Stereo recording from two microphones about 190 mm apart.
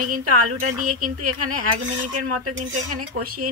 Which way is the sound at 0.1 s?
45° right (ahead or behind).